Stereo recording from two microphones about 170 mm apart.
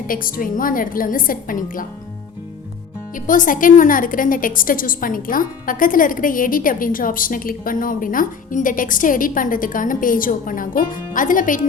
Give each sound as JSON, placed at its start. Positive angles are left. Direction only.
{"t": 0.1, "sound": "a woman's voice", "side_deg": 55}
{"t": 3.2, "sound": "a woman's voice", "side_deg": 50}